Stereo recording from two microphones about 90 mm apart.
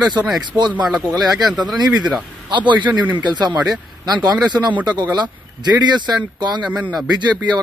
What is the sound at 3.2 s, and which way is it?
Speech, 55° right (ahead or behind).